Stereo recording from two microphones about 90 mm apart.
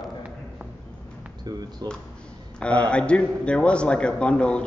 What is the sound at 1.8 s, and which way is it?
Speech, 45° right (ahead or behind).